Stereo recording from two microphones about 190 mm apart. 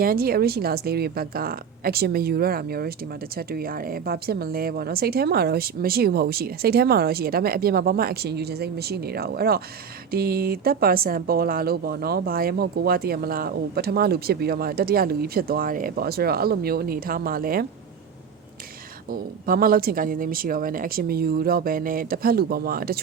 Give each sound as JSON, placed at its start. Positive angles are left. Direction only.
{"t": 0.0, "sound": "speech", "side_deg": -50}
{"t": 19.1, "sound": "speech", "side_deg": -50}